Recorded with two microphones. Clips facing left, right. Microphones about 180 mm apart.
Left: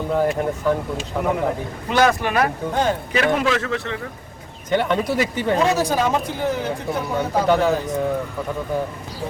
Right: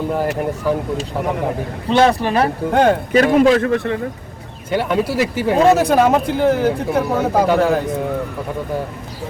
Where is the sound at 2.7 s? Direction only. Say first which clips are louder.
Right 8 dB; 60° right (ahead or behind).